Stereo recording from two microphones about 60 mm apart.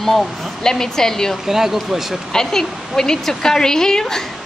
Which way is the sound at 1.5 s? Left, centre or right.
Centre.